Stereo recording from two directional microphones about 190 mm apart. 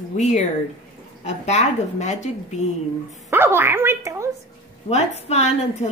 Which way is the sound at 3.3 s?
10° right (ahead or behind).